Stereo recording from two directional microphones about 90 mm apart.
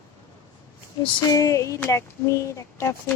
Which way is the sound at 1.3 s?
35° left (ahead or behind).